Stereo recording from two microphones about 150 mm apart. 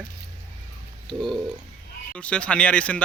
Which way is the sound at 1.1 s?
5° left (ahead or behind).